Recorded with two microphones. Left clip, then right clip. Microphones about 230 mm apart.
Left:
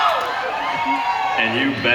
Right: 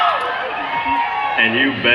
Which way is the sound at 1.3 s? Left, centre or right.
Centre.